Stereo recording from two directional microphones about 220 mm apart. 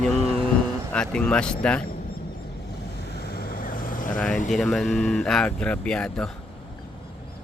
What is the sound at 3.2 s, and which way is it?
Vehicle, 45° left (ahead or behind).